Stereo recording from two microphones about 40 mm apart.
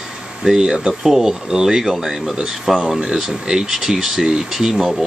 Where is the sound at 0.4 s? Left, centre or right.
Centre.